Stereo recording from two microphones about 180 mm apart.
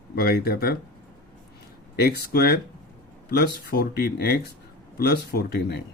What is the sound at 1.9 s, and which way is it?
Speech, 65° left (ahead or behind).